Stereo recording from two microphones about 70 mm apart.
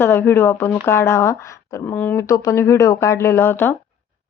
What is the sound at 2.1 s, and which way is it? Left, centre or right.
Speech, left.